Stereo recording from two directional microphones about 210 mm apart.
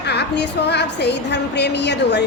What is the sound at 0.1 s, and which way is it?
A woman's voice, 55° left (ahead or behind).